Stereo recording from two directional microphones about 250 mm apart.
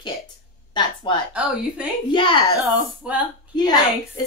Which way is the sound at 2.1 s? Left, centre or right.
Centre.